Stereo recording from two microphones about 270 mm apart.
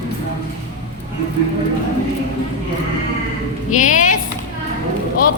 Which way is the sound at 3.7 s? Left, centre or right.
Left.